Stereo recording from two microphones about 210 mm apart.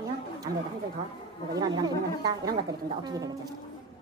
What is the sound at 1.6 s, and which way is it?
Speech, 20° right (ahead or behind).